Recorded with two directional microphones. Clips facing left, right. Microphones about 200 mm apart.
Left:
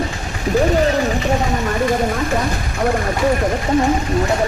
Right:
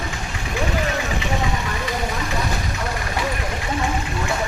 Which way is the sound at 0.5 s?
40° left (ahead or behind).